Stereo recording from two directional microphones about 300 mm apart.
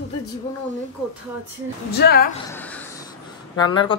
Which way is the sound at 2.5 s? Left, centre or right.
Centre.